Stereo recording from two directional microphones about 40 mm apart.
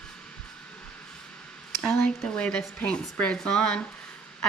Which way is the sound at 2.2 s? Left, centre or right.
Left.